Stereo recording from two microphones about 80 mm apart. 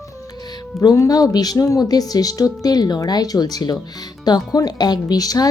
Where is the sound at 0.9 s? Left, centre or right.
Left.